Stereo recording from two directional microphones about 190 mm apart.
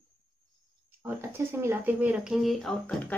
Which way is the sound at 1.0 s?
15° right (ahead or behind).